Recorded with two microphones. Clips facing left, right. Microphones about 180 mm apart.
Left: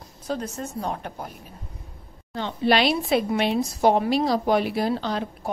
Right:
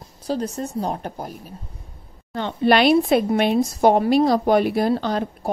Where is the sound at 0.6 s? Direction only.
30° right (ahead or behind).